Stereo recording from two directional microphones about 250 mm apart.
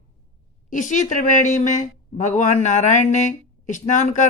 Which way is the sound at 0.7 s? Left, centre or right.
Left.